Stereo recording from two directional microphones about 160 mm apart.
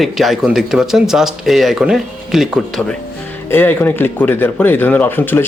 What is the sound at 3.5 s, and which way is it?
Speech, 15° left (ahead or behind).